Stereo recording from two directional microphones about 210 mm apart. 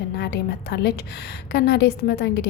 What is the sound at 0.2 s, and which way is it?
A woman's voice, 55° left (ahead or behind).